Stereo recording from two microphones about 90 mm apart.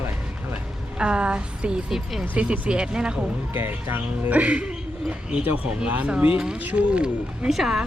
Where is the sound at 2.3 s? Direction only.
15° right (ahead or behind).